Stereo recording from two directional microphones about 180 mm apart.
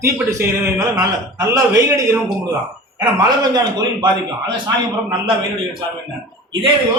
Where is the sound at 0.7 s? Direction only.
20° right (ahead or behind).